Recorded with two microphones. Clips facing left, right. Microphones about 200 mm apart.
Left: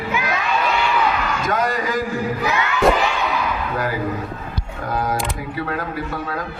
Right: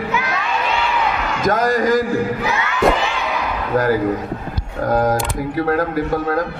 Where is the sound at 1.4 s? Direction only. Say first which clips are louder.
Right 8 dB; 45° right (ahead or behind).